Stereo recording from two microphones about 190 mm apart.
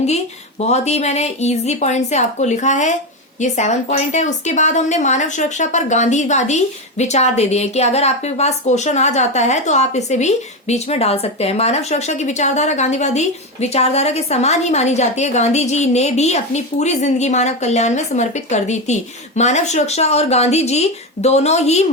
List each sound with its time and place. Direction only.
0.6 s speech: 35° left (ahead or behind)